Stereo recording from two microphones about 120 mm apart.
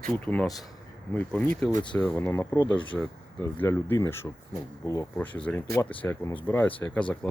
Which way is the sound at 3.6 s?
20° left (ahead or behind).